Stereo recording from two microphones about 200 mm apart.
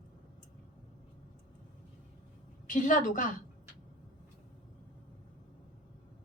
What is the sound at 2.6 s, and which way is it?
Speech, 40° left (ahead or behind).